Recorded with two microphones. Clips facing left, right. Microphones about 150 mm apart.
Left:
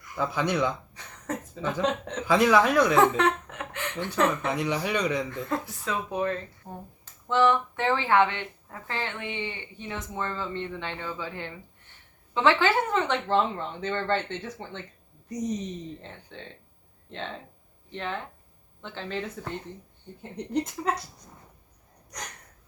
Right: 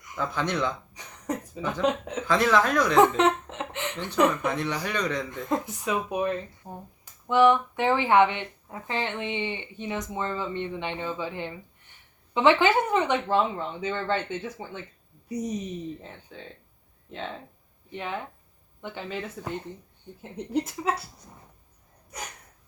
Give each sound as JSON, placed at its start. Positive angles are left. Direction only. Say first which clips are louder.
{"t": 0.2, "sound": "speech", "louder": "left 2 dB", "side_deg": 10}
{"t": 0.9, "sound": "a sound", "louder": "right 2 dB", "side_deg": -10}
{"t": 1.8, "sound": "speech", "louder": "right 3 dB", "side_deg": -5}
{"t": 2.2, "sound": "speech", "louder": "left 2 dB", "side_deg": 10}
{"t": 2.9, "sound": "chuckle", "louder": "right 2 dB", "side_deg": -20}
{"t": 4.3, "sound": "speech", "louder": "even", "side_deg": 10}
{"t": 5.3, "sound": "speech", "louder": "right 2 dB", "side_deg": -20}
{"t": 22.1, "sound": "speech", "louder": "right 2 dB", "side_deg": -5}